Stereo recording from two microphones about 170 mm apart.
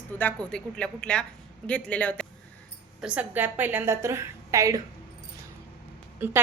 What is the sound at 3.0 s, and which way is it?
A woman's voice, 5° right (ahead or behind).